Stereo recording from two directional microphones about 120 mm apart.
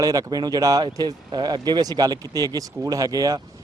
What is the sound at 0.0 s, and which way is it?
A man's voice, 30° right (ahead or behind).